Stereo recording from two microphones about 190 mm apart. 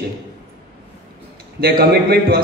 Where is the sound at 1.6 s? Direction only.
55° right (ahead or behind).